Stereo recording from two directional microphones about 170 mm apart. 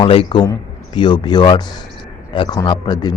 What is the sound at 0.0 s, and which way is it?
A man's voice, 30° left (ahead or behind).